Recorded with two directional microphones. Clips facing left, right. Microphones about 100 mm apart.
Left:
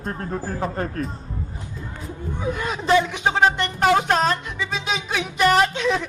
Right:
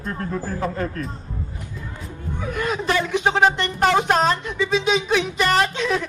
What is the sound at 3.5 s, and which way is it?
Speech, 10° left (ahead or behind).